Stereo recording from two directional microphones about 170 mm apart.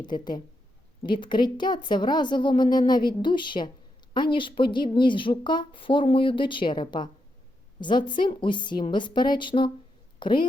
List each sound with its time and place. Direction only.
0.0 s a woman's voice: 25° left (ahead or behind)